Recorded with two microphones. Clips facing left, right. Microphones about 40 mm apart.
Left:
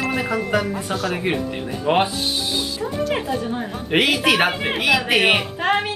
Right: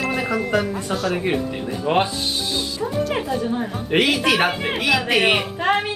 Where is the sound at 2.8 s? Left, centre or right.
Centre.